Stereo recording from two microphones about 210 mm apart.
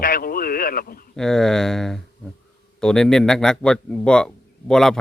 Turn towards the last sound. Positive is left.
turn(degrees=0)  # may be behind; listen again after turning